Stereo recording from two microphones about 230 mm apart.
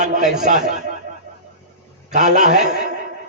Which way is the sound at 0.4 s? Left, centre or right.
Right.